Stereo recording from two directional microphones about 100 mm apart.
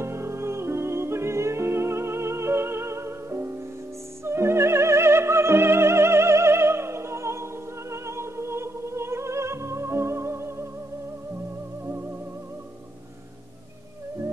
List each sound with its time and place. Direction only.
0.0 s music: 25° right (ahead or behind)
4.2 s opera: 25° right (ahead or behind)
7.9 s music: 30° right (ahead or behind)